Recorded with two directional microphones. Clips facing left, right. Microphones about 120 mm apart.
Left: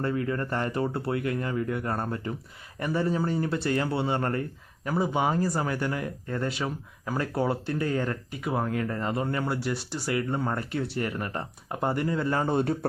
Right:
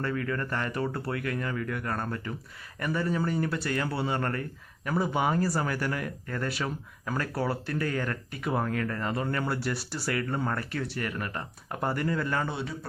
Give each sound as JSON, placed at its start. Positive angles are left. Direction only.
{"t": 0.0, "sound": "speech", "side_deg": 25}
{"t": 8.4, "sound": "speech", "side_deg": 10}
{"t": 8.7, "sound": "speech", "side_deg": 25}
{"t": 12.5, "sound": "a man's voice", "side_deg": 45}